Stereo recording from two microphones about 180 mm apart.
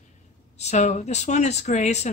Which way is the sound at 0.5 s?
40° left (ahead or behind).